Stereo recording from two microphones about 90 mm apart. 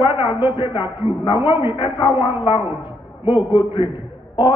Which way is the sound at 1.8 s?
65° left (ahead or behind).